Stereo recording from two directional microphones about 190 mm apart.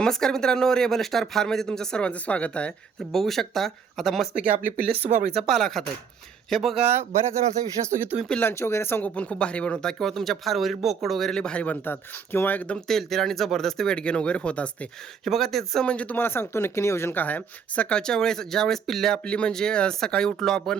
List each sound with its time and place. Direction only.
0.0 s speech: 5° left (ahead or behind)
4.4 s speech: 50° right (ahead or behind)
5.0 s speech: 35° right (ahead or behind)
5.4 s speech: centre (ahead or behind)
6.7 s speech: 35° right (ahead or behind)
8.2 s speech: 5° left (ahead or behind)